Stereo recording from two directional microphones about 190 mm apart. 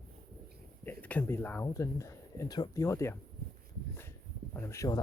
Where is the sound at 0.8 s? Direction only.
10° left (ahead or behind).